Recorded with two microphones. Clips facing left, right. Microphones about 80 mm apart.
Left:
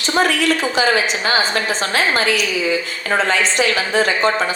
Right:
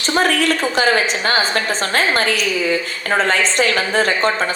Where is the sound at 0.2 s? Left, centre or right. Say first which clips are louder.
Even; right.